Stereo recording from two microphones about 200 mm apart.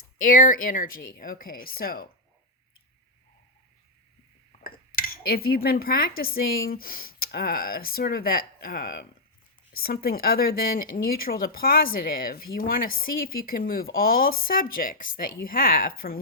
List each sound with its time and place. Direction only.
0.2 s speech: 40° left (ahead or behind)
4.6 s speech: 45° left (ahead or behind)